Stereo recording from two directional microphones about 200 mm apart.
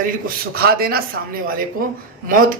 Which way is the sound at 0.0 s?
45° right (ahead or behind).